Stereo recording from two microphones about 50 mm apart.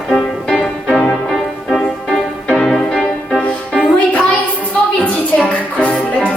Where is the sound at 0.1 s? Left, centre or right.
Centre.